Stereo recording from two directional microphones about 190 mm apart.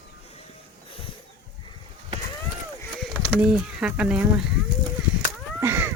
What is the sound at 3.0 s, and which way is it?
Speech, 5° right (ahead or behind).